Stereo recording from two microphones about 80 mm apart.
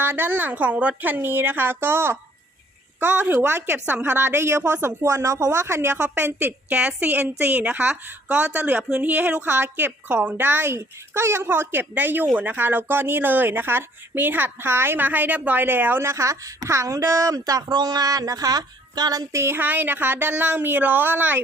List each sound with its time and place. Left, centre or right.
0.0 s a woman's voice: right
5.0 s a woman's voice: right
17.7 s a woman's voice: right
19.3 s a woman's voice: right